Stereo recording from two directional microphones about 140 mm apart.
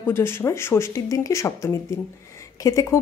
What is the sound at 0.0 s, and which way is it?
Speech, 15° left (ahead or behind).